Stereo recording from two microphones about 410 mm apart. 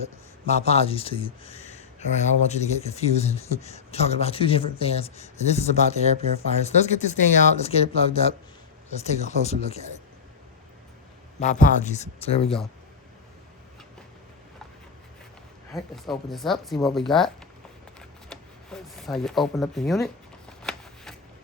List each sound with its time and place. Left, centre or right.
0.4 s speech: centre
11.6 s speech: centre
15.7 s speech: centre
20.6 s shuffling cards: centre